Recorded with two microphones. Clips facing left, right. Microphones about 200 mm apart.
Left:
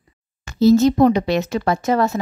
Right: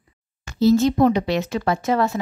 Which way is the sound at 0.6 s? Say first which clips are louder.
Left 3 dB; 45° left (ahead or behind).